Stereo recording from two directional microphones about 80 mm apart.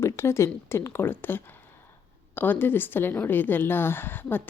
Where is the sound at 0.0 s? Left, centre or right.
Left.